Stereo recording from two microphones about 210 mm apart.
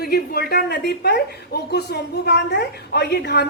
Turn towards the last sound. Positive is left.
turn(degrees=50)  # may be behind; listen again after turning